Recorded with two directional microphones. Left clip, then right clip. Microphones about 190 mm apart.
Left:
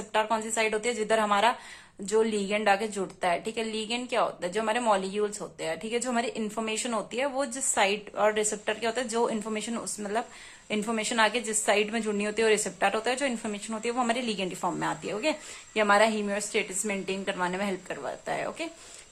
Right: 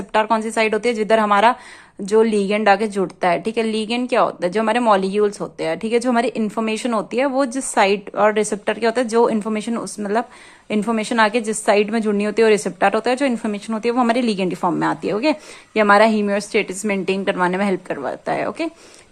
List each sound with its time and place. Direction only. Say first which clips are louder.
0.1 s a woman's voice: right 10 dB; 35° right (ahead or behind)